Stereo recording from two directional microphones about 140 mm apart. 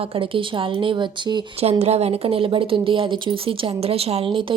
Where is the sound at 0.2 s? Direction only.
40° right (ahead or behind).